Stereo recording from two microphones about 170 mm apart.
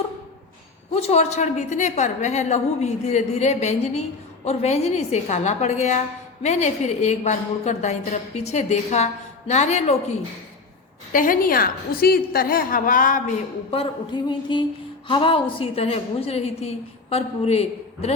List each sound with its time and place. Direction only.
0.9 s a woman's voice: 40° left (ahead or behind)
11.1 s a woman's voice: 55° left (ahead or behind)
13.7 s a woman's voice: 35° left (ahead or behind)